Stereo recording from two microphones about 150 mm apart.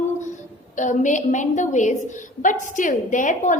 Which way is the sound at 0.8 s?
55° left (ahead or behind).